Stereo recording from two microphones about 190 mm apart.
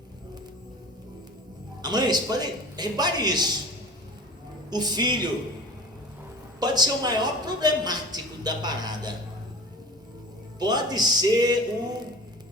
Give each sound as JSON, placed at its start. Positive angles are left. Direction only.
{"t": 1.8, "sound": "a woman's voice", "side_deg": -20}
{"t": 4.7, "sound": "a woman's voice", "side_deg": -20}
{"t": 6.6, "sound": "a woman's voice", "side_deg": -20}
{"t": 10.6, "sound": "a woman's voice", "side_deg": -20}